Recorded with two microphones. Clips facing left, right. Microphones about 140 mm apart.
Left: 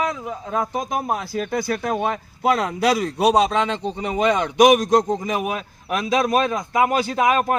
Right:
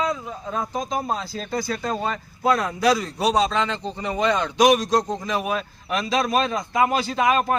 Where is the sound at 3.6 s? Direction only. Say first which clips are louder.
Left 3 dB; 15° left (ahead or behind).